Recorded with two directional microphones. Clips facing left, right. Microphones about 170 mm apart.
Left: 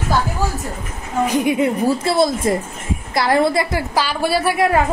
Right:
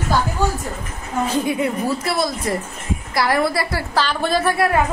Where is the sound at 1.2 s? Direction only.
15° left (ahead or behind).